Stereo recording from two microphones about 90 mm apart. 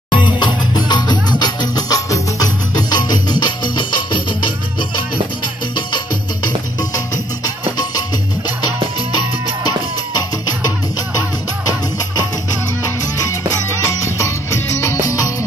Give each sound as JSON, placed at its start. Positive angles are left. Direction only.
{"t": 0.1, "sound": "music", "side_deg": 60}
{"t": 5.8, "sound": "music", "side_deg": 60}
{"t": 13.8, "sound": "music", "side_deg": 35}